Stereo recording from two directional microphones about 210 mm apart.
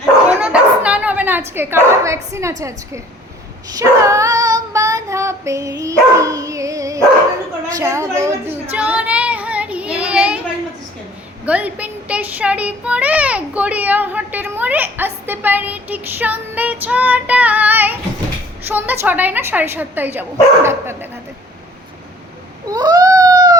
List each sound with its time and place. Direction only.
0.3 s bow-wow: 5° right (ahead or behind)
3.8 s female singing: 15° right (ahead or behind)
5.8 s dog: 15° right (ahead or behind)
7.7 s a child's voice: 15° right (ahead or behind)
8.7 s child singing: 5° right (ahead or behind)
11.4 s a child's voice: 5° right (ahead or behind)
22.7 s cat: 20° right (ahead or behind)